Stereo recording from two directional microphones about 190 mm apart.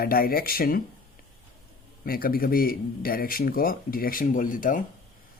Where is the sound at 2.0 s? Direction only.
50° left (ahead or behind).